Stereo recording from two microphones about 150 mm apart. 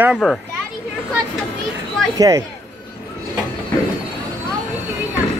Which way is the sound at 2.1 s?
25° right (ahead or behind).